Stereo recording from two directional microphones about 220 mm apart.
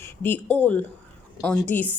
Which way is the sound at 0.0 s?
10° left (ahead or behind).